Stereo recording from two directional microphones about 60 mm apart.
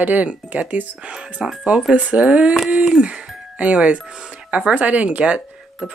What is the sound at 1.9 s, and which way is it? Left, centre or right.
Speech, right.